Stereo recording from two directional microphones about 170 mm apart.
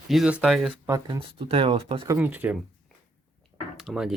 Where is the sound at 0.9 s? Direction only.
20° right (ahead or behind).